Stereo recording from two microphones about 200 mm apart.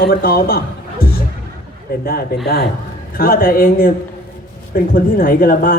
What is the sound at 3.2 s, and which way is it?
Speech, 45° left (ahead or behind).